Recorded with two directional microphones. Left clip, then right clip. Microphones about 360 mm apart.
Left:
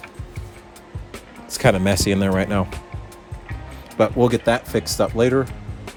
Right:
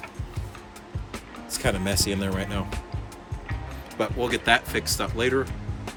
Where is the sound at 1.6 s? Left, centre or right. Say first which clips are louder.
Left 8 dB; left.